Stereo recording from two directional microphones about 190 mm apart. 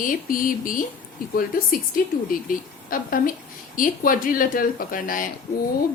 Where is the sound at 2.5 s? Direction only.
50° left (ahead or behind).